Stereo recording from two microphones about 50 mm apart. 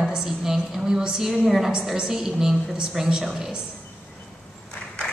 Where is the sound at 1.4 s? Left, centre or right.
Centre.